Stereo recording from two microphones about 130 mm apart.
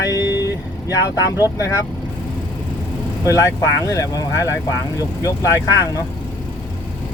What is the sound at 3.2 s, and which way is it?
Speech, 25° left (ahead or behind).